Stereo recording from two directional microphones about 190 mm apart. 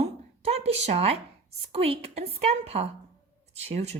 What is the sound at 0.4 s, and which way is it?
A woman's voice, 35° right (ahead or behind).